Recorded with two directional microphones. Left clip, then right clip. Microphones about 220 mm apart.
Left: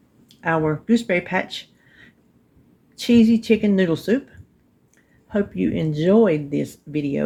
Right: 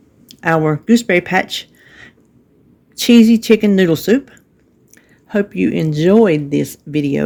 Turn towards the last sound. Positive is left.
turn(degrees=-45)  # may be behind; listen again after turning